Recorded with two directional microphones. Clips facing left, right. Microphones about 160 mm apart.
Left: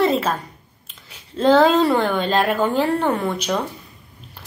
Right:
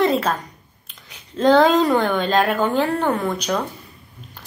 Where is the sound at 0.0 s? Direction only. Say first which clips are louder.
Even; 5° left (ahead or behind).